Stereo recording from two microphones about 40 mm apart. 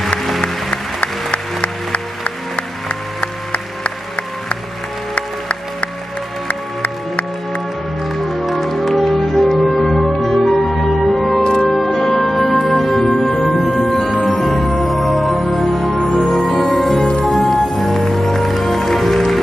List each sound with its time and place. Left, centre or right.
1.0 s music: left
5.1 s music: left
8.0 s music: centre